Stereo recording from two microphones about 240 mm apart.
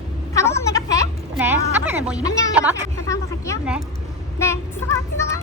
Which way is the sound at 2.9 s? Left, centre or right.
Centre.